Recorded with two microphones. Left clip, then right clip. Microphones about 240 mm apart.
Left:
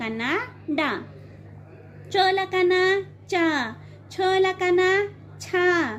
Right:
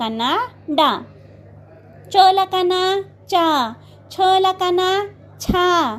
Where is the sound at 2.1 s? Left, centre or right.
Right.